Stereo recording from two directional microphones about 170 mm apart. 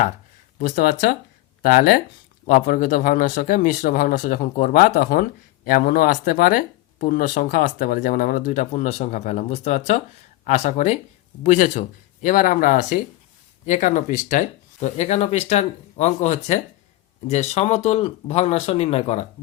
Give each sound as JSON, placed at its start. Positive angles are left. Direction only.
{"t": 0.6, "sound": "speech", "side_deg": 55}